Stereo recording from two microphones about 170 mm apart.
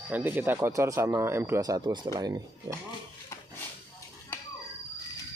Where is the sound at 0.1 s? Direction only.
10° right (ahead or behind).